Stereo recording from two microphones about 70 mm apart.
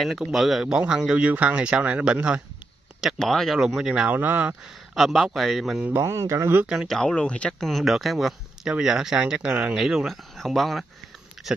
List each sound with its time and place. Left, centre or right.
0.0 s speech: centre
3.2 s speech: centre
4.1 s speech: right
4.9 s speech: centre
5.9 s speech: right
6.6 s speech: centre
6.9 s speech: centre
7.6 s speech: centre
9.8 s speech: centre
11.4 s a sound: centre